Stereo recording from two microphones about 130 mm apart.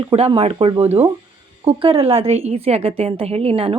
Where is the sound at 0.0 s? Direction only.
40° right (ahead or behind).